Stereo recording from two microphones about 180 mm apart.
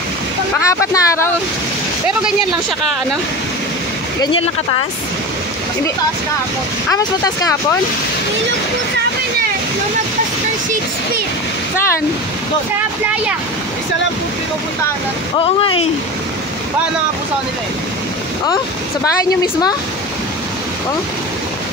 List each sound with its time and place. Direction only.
0.6 s speech: 20° left (ahead or behind)
4.2 s speech: 30° left (ahead or behind)
6.9 s speech: 20° left (ahead or behind)
15.3 s speech: 30° left (ahead or behind)